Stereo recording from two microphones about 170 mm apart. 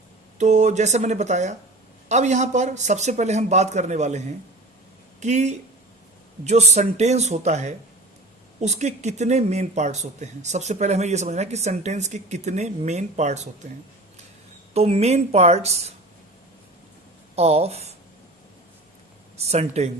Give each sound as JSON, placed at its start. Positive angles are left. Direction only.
{"t": 0.3, "sound": "a man's voice", "side_deg": -45}
{"t": 14.7, "sound": "speech", "side_deg": -40}
{"t": 17.3, "sound": "speech", "side_deg": -40}
{"t": 19.4, "sound": "speech", "side_deg": -40}